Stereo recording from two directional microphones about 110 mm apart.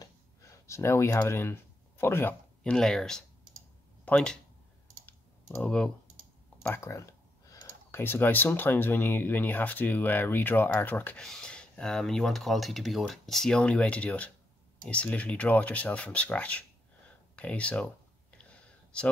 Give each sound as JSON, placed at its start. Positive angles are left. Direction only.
{"t": 0.0, "sound": "clicking", "side_deg": 30}
{"t": 2.6, "sound": "speech", "side_deg": 5}
{"t": 5.0, "sound": "clicking", "side_deg": 10}
{"t": 6.8, "sound": "speech", "side_deg": 30}
{"t": 18.4, "sound": "a sound", "side_deg": 10}